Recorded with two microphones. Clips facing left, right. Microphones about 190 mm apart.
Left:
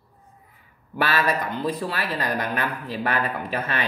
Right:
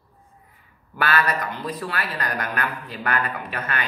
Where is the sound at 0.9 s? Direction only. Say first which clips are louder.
Even; 25° left (ahead or behind).